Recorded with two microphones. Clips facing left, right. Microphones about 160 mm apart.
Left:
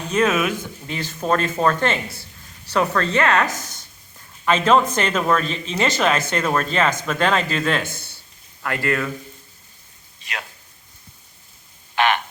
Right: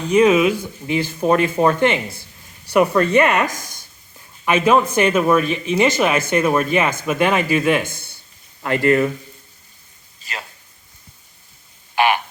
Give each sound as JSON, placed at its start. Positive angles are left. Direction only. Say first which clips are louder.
{"t": 0.1, "sound": "speech", "louder": "right 6 dB", "side_deg": -15}
{"t": 10.2, "sound": "a sound", "louder": "even", "side_deg": 0}
{"t": 11.9, "sound": "frog", "louder": "right 2 dB", "side_deg": -10}